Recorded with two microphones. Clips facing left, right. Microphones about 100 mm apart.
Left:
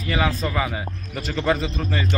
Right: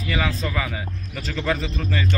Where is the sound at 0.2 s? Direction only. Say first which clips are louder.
Left 6 dB; 15° left (ahead or behind).